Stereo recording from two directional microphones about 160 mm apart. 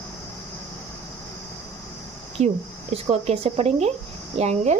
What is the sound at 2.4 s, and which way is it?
Speech, 45° right (ahead or behind).